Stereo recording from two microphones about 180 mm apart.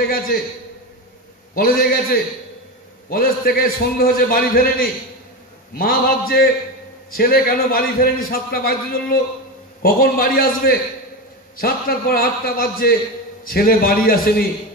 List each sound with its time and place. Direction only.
1.5 s a man's voice: 55° left (ahead or behind)